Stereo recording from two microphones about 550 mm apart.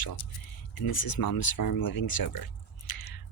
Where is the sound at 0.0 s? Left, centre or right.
Left.